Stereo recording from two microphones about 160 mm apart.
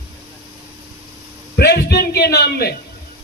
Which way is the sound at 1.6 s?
80° left.